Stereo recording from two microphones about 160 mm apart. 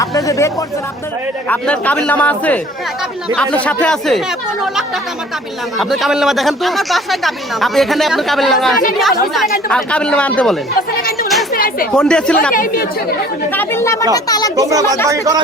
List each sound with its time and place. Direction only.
0.0 s speech: 20° left (ahead or behind)
1.5 s speech: 10° left (ahead or behind)
10.8 s speech: 65° left (ahead or behind)
11.9 s speech: 5° left (ahead or behind)
12.5 s speech: 60° left (ahead or behind)
13.5 s speech: 15° left (ahead or behind)
14.5 s speech: 20° right (ahead or behind)